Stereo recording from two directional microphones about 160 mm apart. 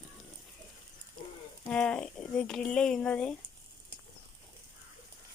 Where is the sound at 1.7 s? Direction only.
5° left (ahead or behind).